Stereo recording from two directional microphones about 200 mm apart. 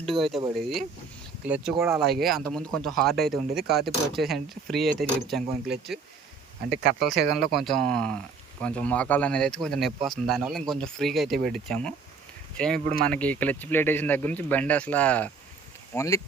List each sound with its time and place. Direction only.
0.0 s speech: centre (ahead or behind)
1.5 s speech: 5° right (ahead or behind)
7.0 s speech: centre (ahead or behind); by 16.2 s 15° left (ahead or behind)